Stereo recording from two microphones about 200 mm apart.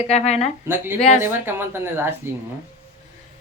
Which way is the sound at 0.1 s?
35° left (ahead or behind).